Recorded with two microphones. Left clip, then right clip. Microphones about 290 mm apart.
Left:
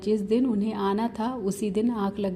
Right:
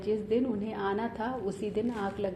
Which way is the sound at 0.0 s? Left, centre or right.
Left.